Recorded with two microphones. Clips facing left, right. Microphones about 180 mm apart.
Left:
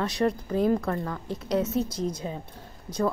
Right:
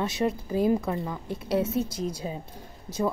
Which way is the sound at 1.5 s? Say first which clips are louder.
Even; 30° right (ahead or behind).